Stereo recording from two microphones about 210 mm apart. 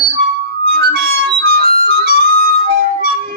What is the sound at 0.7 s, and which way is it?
Harmonica, 45° right (ahead or behind).